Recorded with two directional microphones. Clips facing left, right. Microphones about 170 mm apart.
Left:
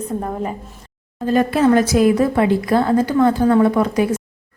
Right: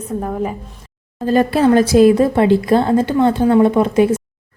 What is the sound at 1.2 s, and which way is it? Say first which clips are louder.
A woman's voice: right 2 dB; 35° right (ahead or behind).